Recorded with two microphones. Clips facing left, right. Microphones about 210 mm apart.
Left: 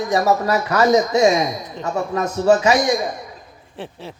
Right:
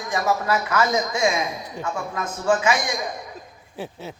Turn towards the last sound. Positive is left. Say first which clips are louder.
# even
turn(degrees=-5)  # may be behind; listen again after turning